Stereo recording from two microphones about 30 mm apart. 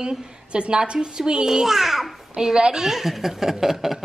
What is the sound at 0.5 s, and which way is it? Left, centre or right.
Speech, right.